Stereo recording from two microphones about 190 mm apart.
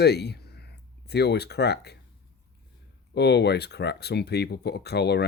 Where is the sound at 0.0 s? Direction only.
60° left (ahead or behind).